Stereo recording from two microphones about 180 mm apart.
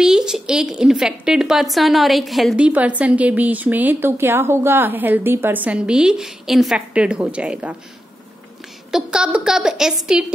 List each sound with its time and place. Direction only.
0.0 s a woman's voice: 5° right (ahead or behind)
8.9 s a woman's voice: 5° right (ahead or behind)